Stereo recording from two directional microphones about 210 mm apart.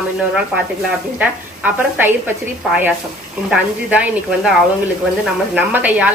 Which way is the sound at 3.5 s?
5° right (ahead or behind).